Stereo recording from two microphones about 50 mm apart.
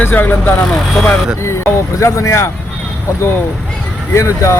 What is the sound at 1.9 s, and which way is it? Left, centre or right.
Speech, left.